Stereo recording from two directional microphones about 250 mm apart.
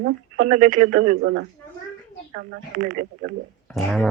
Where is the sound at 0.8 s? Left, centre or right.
Right.